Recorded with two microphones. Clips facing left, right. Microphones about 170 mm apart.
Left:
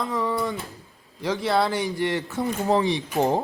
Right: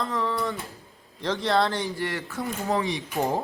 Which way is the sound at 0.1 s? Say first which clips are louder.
Left 2 dB; 15° left (ahead or behind).